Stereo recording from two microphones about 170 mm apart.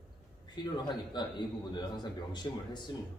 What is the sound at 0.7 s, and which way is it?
A man's voice, 25° left (ahead or behind).